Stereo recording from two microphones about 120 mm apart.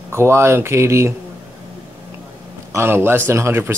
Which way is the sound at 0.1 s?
20° right (ahead or behind).